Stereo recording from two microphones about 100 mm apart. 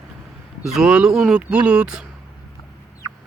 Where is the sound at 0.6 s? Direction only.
5° right (ahead or behind).